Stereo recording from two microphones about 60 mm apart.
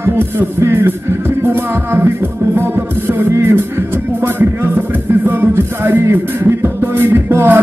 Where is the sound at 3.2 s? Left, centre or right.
Right.